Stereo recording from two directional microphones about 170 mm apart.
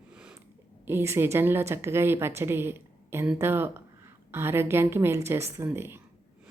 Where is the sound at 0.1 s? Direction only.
5° right (ahead or behind).